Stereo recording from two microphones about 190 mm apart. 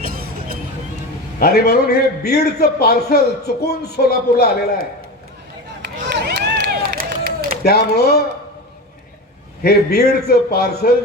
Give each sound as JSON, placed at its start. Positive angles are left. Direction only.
{"t": 1.4, "sound": "a man's voice", "side_deg": 55}
{"t": 6.1, "sound": "run", "side_deg": -60}
{"t": 7.6, "sound": "a man's voice", "side_deg": 55}
{"t": 9.6, "sound": "a man's voice", "side_deg": 55}